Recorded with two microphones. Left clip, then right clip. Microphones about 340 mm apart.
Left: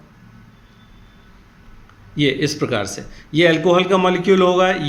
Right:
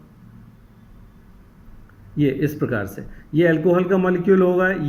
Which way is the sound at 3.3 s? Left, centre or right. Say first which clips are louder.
Left 3 dB; left.